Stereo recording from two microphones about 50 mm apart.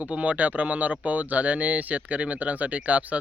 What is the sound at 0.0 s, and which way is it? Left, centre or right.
Speech, right.